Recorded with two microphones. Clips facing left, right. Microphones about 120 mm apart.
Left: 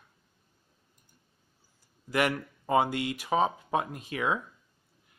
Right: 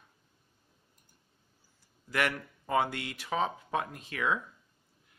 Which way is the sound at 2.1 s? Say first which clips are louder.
Left 4 dB; 15° left (ahead or behind).